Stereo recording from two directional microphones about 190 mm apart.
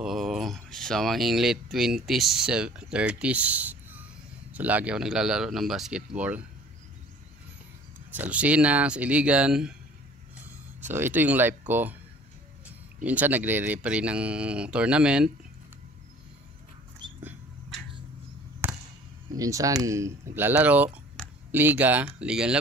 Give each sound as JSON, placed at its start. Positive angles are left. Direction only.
{"t": 0.0, "sound": "speech", "side_deg": 0}
{"t": 8.1, "sound": "speech", "side_deg": -10}
{"t": 18.6, "sound": "basketball bounce", "side_deg": -10}
{"t": 19.3, "sound": "speech", "side_deg": -20}